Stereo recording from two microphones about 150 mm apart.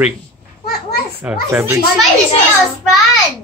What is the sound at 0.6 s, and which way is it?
Children playing, 90° left.